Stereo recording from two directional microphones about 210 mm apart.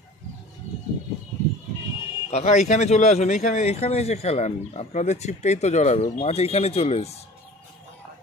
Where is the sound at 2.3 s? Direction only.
30° left (ahead or behind).